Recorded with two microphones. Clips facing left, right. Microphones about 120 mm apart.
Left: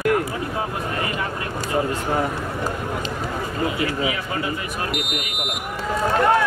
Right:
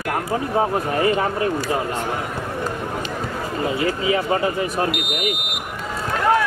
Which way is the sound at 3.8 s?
30° right (ahead or behind).